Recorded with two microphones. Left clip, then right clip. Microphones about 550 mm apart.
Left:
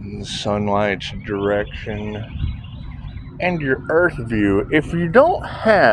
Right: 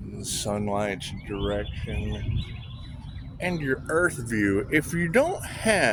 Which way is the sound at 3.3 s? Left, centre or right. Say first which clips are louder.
Left 8 dB; right.